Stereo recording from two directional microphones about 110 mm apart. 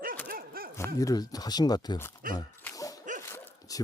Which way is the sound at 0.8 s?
30° left (ahead or behind).